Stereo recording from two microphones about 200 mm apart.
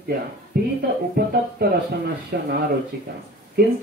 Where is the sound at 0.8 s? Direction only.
50° right (ahead or behind).